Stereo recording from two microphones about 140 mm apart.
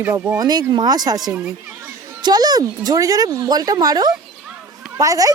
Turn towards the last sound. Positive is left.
turn(degrees=-25)  # may be behind; listen again after turning